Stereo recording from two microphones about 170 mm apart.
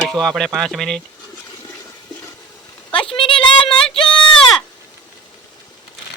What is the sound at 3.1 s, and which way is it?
Child singing, 30° left (ahead or behind).